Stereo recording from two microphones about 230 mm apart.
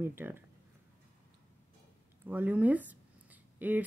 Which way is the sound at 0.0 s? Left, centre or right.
Centre.